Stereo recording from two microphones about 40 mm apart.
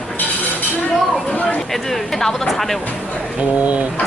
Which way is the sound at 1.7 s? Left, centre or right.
Centre.